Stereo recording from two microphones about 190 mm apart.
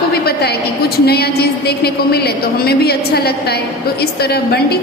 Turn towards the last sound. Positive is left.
turn(degrees=55)  # may be behind; listen again after turning